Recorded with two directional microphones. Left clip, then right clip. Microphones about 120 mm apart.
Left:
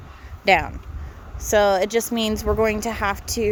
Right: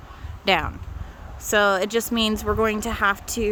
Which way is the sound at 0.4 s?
10° right (ahead or behind).